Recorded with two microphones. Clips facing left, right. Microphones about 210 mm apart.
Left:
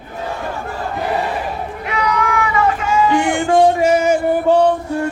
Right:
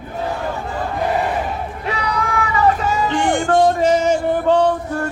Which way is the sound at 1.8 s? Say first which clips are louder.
Left 3 dB; 35° right (ahead or behind).